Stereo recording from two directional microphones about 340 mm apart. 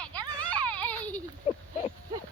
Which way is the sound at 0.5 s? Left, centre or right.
Centre.